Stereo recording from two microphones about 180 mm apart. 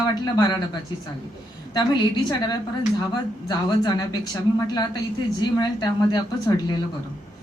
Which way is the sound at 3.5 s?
20° left (ahead or behind).